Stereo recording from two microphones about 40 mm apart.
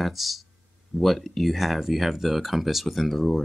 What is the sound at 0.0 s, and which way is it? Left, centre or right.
Speech, centre.